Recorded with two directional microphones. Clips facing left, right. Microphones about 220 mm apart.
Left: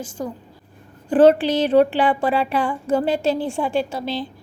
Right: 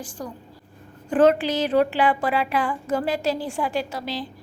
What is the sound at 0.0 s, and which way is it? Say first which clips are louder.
A woman's voice: left 5 dB; 25° left (ahead or behind).